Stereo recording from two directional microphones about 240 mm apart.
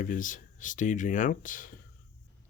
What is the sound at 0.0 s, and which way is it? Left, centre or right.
Speech, left.